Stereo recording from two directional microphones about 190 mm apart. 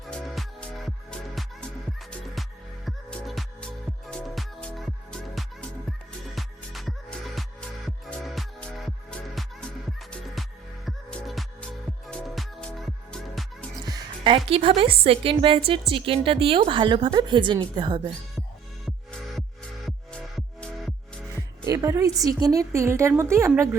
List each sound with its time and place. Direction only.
0.1 s music: 5° left (ahead or behind)
2.0 s music: centre (ahead or behind)
13.8 s a woman's voice: 25° right (ahead or behind)
20.3 s music: 5° left (ahead or behind)
21.6 s a woman's voice: 15° right (ahead or behind)